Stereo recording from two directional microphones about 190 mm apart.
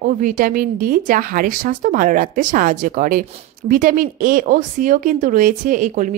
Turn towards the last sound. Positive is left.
turn(degrees=-40)  # may be behind; listen again after turning